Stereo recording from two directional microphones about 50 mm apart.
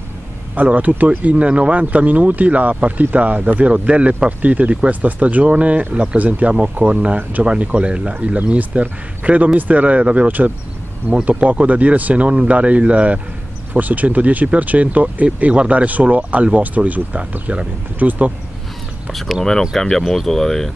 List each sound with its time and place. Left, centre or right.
0.6 s speech: right
19.7 s speech: centre